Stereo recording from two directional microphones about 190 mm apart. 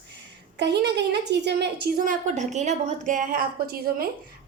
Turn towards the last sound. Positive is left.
turn(degrees=-50)  # may be behind; listen again after turning